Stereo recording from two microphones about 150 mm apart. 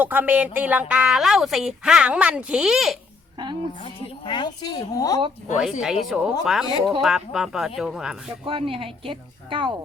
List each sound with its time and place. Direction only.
0.0 s a woman's voice: 10° right (ahead or behind)
3.4 s a woman's voice: 30° right (ahead or behind)
3.8 s a woman's voice: 35° left (ahead or behind)
5.8 s speech: centre (ahead or behind)
8.4 s a woman's voice: 35° right (ahead or behind)